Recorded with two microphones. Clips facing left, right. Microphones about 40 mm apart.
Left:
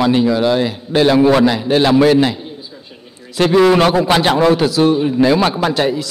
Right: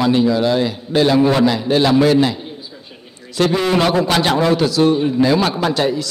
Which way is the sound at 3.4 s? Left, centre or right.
Centre.